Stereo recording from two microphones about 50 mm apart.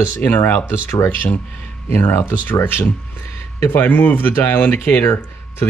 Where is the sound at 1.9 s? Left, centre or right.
Left.